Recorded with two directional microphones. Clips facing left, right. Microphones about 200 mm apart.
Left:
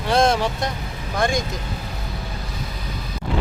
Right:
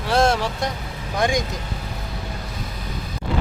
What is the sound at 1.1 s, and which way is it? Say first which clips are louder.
Speech: right 1 dB; 15° right (ahead or behind).